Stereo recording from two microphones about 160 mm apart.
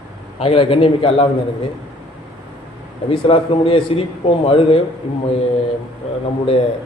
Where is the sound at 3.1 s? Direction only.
35° left (ahead or behind).